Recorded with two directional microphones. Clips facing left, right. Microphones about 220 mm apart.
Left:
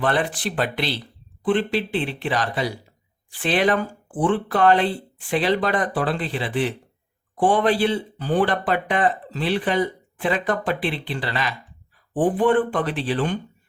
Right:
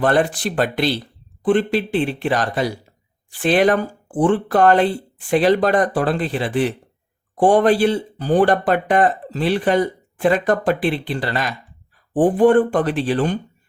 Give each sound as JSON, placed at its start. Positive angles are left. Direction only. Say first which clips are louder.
{"t": 0.0, "sound": "speech", "louder": "right 5 dB", "side_deg": -45}